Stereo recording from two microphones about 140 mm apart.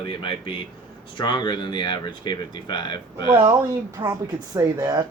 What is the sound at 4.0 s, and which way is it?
Speech, 25° right (ahead or behind).